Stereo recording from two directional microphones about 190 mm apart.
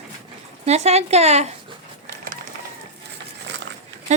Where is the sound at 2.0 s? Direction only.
50° right (ahead or behind).